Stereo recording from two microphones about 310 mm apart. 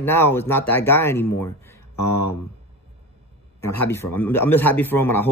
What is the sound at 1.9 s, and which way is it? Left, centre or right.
Speech, left.